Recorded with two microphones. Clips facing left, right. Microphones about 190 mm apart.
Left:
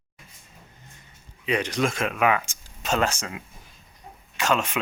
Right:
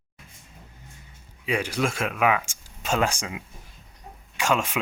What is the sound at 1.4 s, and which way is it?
Speech, 5° right (ahead or behind).